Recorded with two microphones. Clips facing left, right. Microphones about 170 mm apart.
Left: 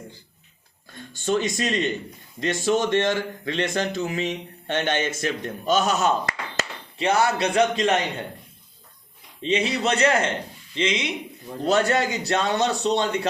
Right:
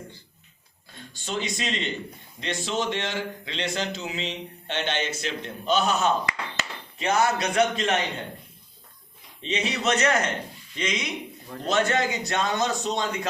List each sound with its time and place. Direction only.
0.9 s a man's voice: 50° left (ahead or behind)
7.1 s a man's voice: 30° left (ahead or behind)
9.4 s a man's voice: 30° left (ahead or behind)